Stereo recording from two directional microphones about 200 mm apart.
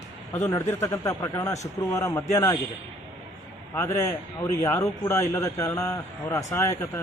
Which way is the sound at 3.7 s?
15° left (ahead or behind).